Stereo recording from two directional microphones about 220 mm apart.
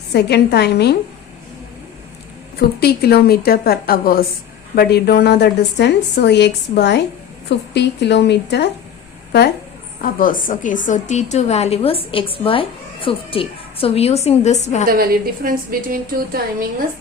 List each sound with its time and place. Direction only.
0.1 s a woman's voice: 50° left (ahead or behind)
2.6 s a woman's voice: 45° left (ahead or behind)
10.0 s a woman's voice: 40° left (ahead or behind)
14.8 s a woman's voice: 40° right (ahead or behind)